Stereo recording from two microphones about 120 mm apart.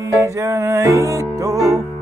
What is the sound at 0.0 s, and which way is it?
Music, 25° right (ahead or behind).